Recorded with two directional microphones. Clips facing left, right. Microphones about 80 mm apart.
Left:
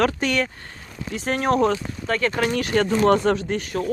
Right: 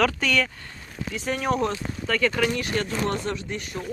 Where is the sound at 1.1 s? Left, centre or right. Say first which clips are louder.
Left 4 dB; left.